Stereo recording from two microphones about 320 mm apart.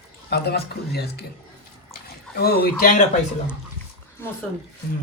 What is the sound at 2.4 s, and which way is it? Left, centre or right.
Speech, left.